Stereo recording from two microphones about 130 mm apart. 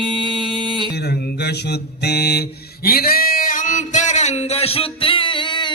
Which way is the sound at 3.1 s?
90° left.